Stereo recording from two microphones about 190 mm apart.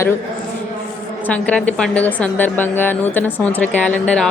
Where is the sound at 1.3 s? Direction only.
5° left (ahead or behind).